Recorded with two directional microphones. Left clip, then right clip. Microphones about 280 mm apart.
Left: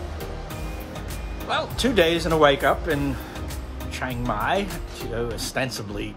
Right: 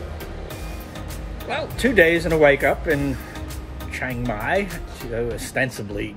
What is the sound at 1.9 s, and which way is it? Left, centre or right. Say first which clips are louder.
Speech: right 4 dB; centre.